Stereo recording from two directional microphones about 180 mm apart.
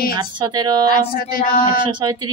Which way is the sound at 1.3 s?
55° left (ahead or behind).